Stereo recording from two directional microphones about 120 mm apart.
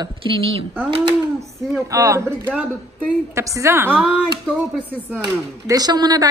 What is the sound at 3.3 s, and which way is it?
Speech, 25° right (ahead or behind).